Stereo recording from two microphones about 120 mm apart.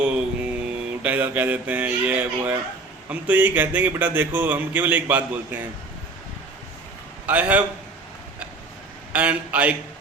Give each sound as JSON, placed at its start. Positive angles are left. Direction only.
{"t": 0.0, "sound": "mantra", "side_deg": -10}
{"t": 1.0, "sound": "a man's voice", "side_deg": -15}
{"t": 7.3, "sound": "a man's voice", "side_deg": -10}
{"t": 9.1, "sound": "a man's voice", "side_deg": -10}